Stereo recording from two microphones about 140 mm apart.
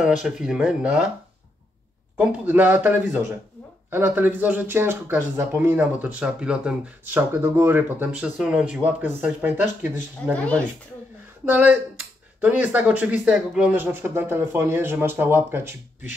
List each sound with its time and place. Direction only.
0.0 s speech: 5° right (ahead or behind)
2.1 s speech: 15° right (ahead or behind)
7.2 s speech: 15° right (ahead or behind)
10.3 s speech: 10° left (ahead or behind)
11.4 s speech: 15° right (ahead or behind)